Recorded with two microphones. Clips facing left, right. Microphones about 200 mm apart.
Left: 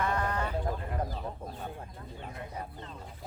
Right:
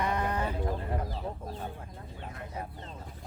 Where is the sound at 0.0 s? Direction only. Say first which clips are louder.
Right 1 dB; 15° right (ahead or behind).